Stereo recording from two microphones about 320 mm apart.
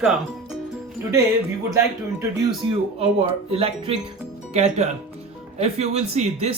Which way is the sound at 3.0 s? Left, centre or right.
Centre.